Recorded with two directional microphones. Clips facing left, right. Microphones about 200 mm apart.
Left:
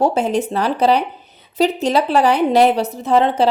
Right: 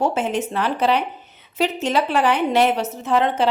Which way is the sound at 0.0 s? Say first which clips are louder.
Left 4 dB; 40° left (ahead or behind).